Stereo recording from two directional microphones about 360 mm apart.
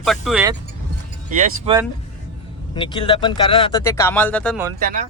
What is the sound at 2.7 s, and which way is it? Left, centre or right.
Speech, centre.